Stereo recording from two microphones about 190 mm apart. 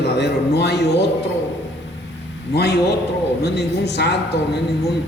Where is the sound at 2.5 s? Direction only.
60° left (ahead or behind).